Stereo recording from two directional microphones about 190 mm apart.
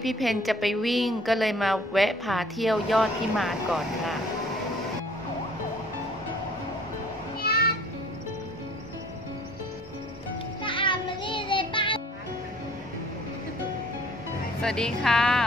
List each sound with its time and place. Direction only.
0.0 s a woman's voice: centre (ahead or behind)
7.4 s music: 55° left (ahead or behind)
10.6 s music: 25° left (ahead or behind)
14.6 s a woman's voice: 5° left (ahead or behind)